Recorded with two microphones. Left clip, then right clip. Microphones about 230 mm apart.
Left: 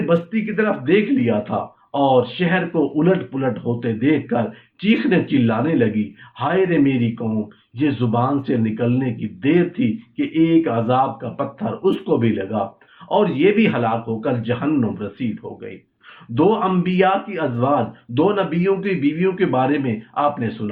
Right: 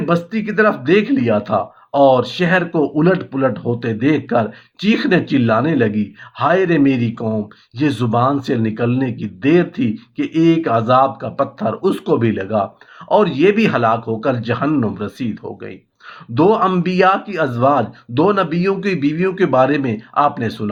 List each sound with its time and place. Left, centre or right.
0.1 s speech: right
16.3 s speech: right